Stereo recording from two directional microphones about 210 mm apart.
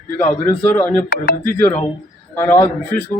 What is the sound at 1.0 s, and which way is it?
Speech, 50° left (ahead or behind).